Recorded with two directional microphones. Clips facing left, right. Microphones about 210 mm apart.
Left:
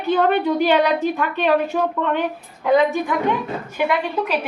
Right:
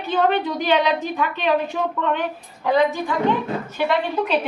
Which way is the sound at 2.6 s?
15° left (ahead or behind).